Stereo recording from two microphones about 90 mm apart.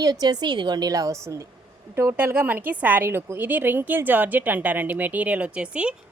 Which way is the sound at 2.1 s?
20° right (ahead or behind).